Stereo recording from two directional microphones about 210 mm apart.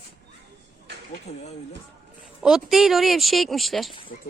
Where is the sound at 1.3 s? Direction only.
35° left (ahead or behind).